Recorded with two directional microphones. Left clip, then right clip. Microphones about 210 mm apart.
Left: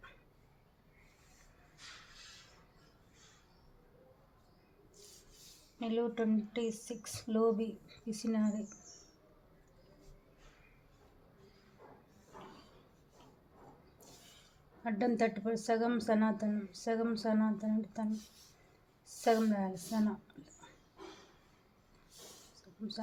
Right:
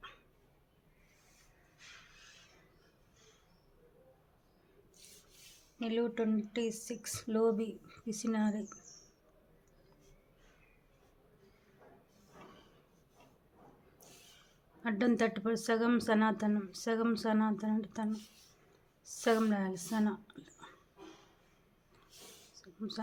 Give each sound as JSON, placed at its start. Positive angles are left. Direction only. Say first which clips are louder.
{"t": 5.9, "sound": "speech", "louder": "even", "side_deg": -25}
{"t": 14.8, "sound": "speech", "louder": "right 1 dB", "side_deg": -25}
{"t": 19.2, "sound": "a woman's voice", "louder": "even", "side_deg": -25}
{"t": 22.8, "sound": "speech", "louder": "right 2 dB", "side_deg": -25}